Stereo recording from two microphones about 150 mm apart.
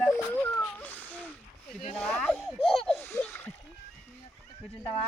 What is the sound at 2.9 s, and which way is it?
Splash, 10° left (ahead or behind).